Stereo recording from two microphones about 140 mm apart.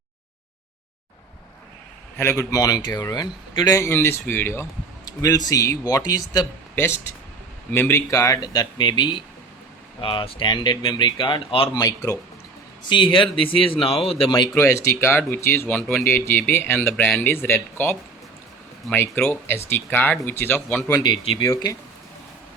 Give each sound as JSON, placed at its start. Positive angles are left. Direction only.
{"t": 2.1, "sound": "a man's voice", "side_deg": 15}
{"t": 5.0, "sound": "a man's voice", "side_deg": 25}
{"t": 7.7, "sound": "a man's voice", "side_deg": 15}
{"t": 11.8, "sound": "a man's voice", "side_deg": 20}
{"t": 12.9, "sound": "speech", "side_deg": 35}
{"t": 14.5, "sound": "speech", "side_deg": 15}
{"t": 21.0, "sound": "a man's voice", "side_deg": 30}